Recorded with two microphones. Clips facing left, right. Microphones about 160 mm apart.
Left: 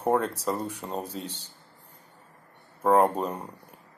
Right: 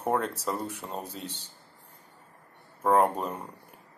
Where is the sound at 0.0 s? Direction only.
10° left (ahead or behind).